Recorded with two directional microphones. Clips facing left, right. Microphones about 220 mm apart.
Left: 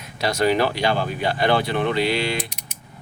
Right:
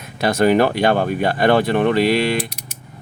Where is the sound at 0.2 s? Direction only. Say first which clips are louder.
Right 5 dB; 50° right (ahead or behind).